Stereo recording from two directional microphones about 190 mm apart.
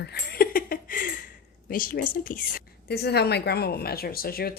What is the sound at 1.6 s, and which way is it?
A woman's voice, 45° left (ahead or behind).